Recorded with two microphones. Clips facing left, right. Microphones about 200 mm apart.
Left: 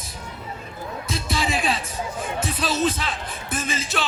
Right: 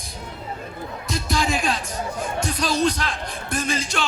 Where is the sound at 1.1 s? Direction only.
Centre (ahead or behind).